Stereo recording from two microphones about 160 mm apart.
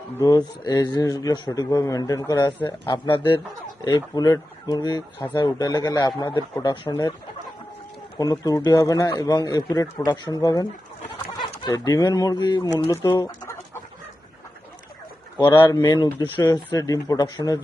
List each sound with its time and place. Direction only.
0.2 s speech: 25° left (ahead or behind)
6.8 s speech: 15° left (ahead or behind)
8.2 s speech: 20° left (ahead or behind)
15.6 s speech: 20° left (ahead or behind)